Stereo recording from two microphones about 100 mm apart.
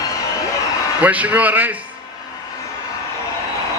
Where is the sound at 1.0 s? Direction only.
15° right (ahead or behind).